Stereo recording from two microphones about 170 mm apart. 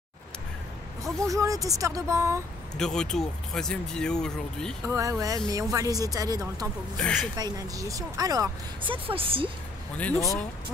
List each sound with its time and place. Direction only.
1.2 s speech: 20° right (ahead or behind)
2.8 s speech: 5° left (ahead or behind)
4.8 s speech: 20° right (ahead or behind)
7.0 s speech: 5° left (ahead or behind)
7.3 s speech: 20° right (ahead or behind)
9.9 s speech: 10° left (ahead or behind)